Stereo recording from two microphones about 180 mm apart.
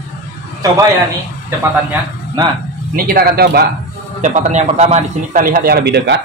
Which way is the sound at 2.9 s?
55° right (ahead or behind).